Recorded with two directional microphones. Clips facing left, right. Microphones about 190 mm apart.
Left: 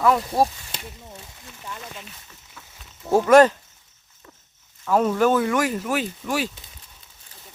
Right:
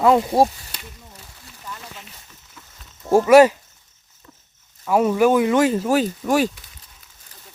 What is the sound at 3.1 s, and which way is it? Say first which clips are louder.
Speech: right 3 dB; 10° right (ahead or behind).